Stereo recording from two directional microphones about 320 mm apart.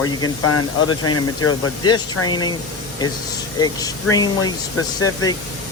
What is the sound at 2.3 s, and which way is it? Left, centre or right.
Speech, centre.